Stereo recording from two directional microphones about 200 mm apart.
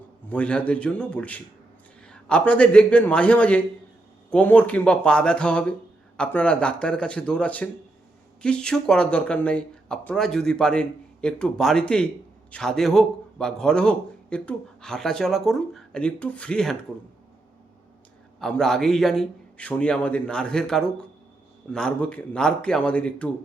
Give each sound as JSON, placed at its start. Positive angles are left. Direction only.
{"t": 0.3, "sound": "a man's voice", "side_deg": 5}
{"t": 18.3, "sound": "a man's voice", "side_deg": 5}